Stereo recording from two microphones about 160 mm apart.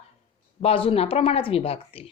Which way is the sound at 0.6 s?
35° left (ahead or behind).